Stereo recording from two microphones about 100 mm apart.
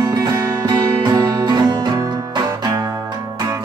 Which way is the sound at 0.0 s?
35° right (ahead or behind).